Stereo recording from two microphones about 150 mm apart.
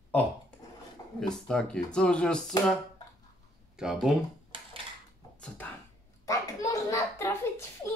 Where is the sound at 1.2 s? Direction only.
5° left (ahead or behind).